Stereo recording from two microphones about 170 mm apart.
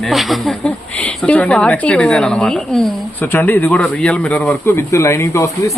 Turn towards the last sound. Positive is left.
turn(degrees=20)  # may be behind; listen again after turning